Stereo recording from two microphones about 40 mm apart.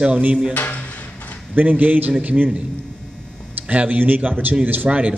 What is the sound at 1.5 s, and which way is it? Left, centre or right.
Speech, right.